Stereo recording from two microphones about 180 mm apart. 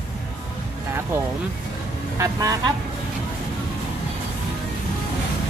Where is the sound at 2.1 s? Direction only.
20° right (ahead or behind).